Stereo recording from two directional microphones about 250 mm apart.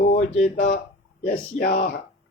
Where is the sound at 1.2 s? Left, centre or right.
Left.